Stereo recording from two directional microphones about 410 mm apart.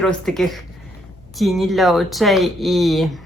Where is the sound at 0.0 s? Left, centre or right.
Centre.